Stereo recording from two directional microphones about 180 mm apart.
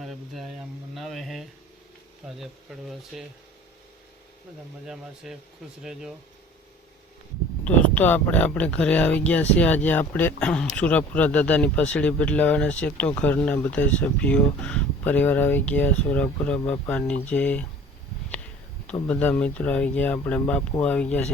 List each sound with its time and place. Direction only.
0.0 s speech: centre (ahead or behind)
4.9 s speech: 5° right (ahead or behind)
7.6 s speech: 10° left (ahead or behind)
19.0 s speech: 5° left (ahead or behind)